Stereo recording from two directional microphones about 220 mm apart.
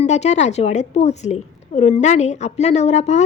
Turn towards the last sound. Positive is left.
turn(degrees=30)  # may be behind; listen again after turning